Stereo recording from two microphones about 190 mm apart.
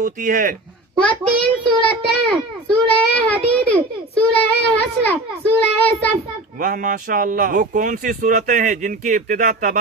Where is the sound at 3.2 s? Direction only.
5° left (ahead or behind).